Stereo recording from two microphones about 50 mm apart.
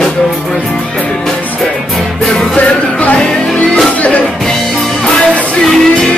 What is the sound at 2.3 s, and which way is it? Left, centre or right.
Music, left.